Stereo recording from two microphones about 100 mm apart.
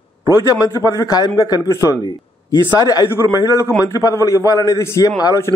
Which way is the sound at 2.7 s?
40° left (ahead or behind).